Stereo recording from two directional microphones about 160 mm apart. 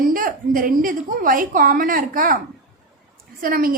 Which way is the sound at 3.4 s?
65° right (ahead or behind).